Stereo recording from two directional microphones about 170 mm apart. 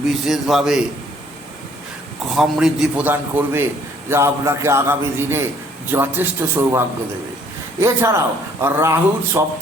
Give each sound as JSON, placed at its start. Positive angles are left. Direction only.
{"t": 0.3, "sound": "a man's voice", "side_deg": 0}
{"t": 2.3, "sound": "a man's voice", "side_deg": 0}